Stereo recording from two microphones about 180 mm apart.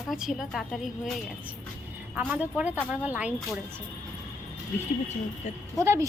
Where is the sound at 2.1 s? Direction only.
10° right (ahead or behind).